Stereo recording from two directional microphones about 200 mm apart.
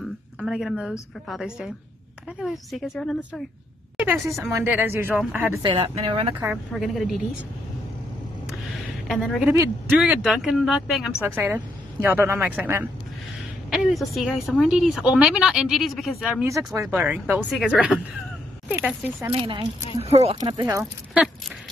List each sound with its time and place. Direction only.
0.4 s a woman's voice: centre (ahead or behind)
4.0 s speech: 15° right (ahead or behind)
5.6 s speech: 25° right (ahead or behind)
6.4 s a woman's voice: 5° right (ahead or behind)
9.0 s a woman's voice: centre (ahead or behind)
20.0 s speech: 30° right (ahead or behind)
20.6 s speech: 5° right (ahead or behind)